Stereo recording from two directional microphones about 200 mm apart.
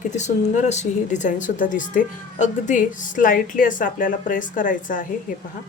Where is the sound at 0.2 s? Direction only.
35° left (ahead or behind).